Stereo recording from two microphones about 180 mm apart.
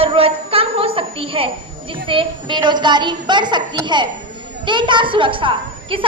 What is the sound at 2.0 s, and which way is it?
A woman's voice, 25° right (ahead or behind).